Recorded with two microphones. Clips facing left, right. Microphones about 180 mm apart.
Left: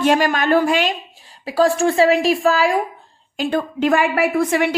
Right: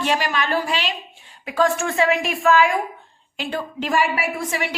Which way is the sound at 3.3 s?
45° left (ahead or behind).